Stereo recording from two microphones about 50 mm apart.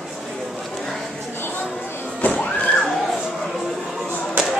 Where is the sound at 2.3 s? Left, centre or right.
Left.